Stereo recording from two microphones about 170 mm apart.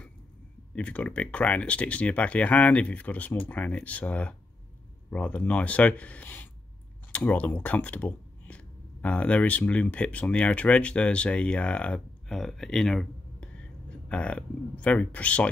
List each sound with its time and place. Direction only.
0.7 s speech: 10° left (ahead or behind)